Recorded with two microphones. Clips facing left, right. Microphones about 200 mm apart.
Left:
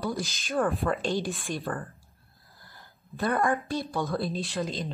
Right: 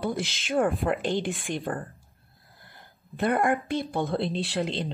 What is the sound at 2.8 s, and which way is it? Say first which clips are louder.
A woman's voice: right 3 dB; 20° right (ahead or behind).